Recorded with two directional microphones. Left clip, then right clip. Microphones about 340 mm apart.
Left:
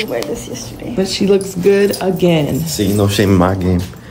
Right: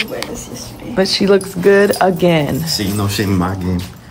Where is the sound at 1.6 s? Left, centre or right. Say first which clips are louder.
Right 2 dB; centre.